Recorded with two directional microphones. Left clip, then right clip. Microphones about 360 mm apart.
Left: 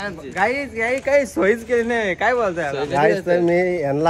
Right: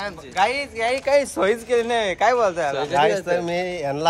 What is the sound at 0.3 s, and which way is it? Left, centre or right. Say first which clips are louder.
Speech: even; centre.